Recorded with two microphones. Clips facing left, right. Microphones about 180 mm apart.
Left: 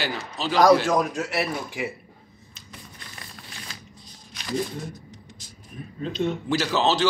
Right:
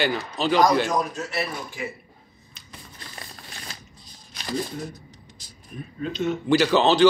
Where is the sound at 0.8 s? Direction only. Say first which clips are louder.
Left 3 dB; 80° left.